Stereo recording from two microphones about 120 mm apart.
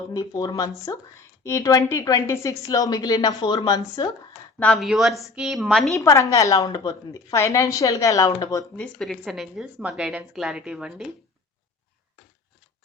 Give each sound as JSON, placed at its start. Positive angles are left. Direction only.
{"t": 0.1, "sound": "a woman's voice", "side_deg": 35}
{"t": 4.6, "sound": "a woman's voice", "side_deg": 5}
{"t": 6.0, "sound": "a woman's voice", "side_deg": 25}
{"t": 9.0, "sound": "a woman's voice", "side_deg": 0}